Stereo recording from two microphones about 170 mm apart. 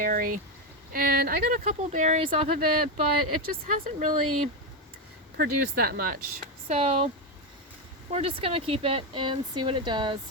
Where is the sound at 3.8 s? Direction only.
45° right (ahead or behind).